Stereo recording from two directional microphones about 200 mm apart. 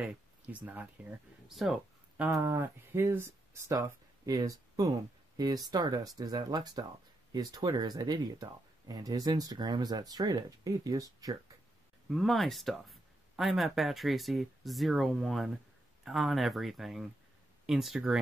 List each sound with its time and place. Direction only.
0.0 s speech: 5° right (ahead or behind)
12.1 s speech: centre (ahead or behind)